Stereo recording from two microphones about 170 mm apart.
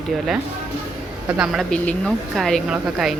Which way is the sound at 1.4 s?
Centre (ahead or behind).